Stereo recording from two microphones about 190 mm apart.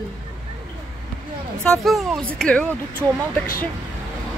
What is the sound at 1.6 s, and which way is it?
Speech, centre (ahead or behind).